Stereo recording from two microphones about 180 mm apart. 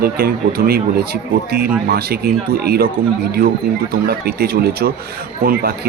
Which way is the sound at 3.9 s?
60° right (ahead or behind).